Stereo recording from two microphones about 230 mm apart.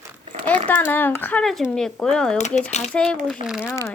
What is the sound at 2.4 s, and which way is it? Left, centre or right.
Speech, left.